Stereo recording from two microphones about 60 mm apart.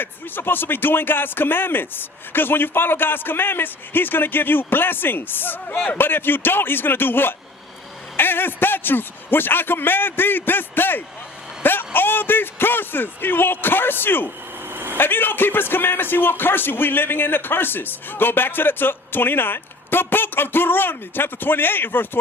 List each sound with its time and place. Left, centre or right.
0.0 s speech: left
11.6 s a sound: left
11.9 s speech: left
14.7 s vehicle: right
14.9 s speech: left